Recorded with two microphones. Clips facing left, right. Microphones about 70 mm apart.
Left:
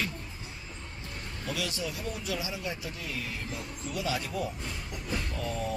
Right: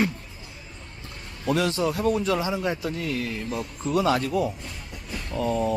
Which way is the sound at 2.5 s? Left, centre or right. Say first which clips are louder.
Right 10 dB; right.